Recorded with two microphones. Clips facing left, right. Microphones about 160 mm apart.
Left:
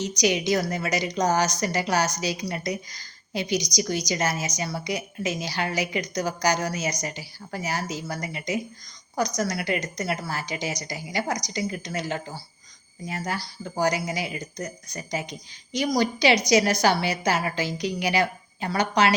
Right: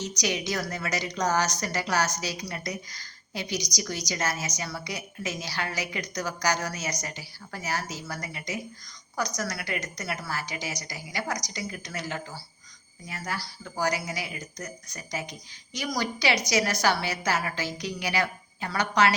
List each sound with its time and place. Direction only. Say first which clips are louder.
0.2 s a woman's voice: left 8 dB; 15° left (ahead or behind)